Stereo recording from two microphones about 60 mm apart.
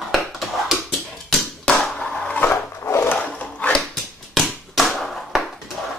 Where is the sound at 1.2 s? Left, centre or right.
Centre.